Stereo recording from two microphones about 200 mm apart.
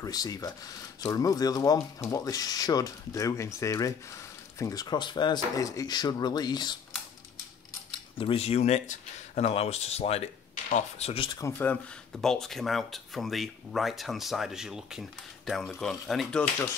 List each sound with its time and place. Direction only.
0.0 s speech: 20° left (ahead or behind)
8.2 s speech: 30° left (ahead or behind); by 16.4 s 5° left (ahead or behind)